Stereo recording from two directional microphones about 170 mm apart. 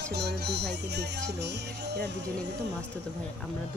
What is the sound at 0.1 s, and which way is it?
Music, 75° right (ahead or behind).